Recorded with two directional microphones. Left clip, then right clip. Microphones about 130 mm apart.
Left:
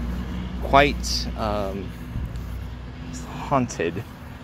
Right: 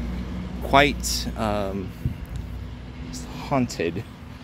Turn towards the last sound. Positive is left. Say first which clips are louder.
# left 2 dB
turn(degrees=-45)  # may be behind; listen again after turning